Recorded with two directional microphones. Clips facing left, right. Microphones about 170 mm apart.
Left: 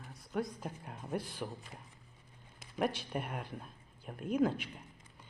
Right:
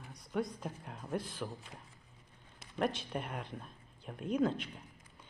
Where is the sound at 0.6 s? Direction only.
Centre (ahead or behind).